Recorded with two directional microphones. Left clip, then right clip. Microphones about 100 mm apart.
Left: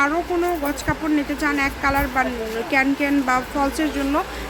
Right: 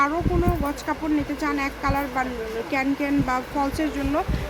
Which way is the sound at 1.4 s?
25° left (ahead or behind).